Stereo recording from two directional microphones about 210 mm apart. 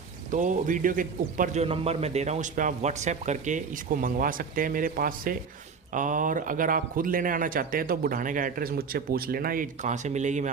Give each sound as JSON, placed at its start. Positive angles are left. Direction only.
{"t": 0.3, "sound": "a man's voice", "side_deg": -40}
{"t": 1.6, "sound": "a man's voice", "side_deg": -30}